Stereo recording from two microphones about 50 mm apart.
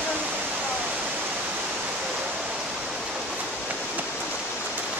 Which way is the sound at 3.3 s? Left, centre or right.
Right.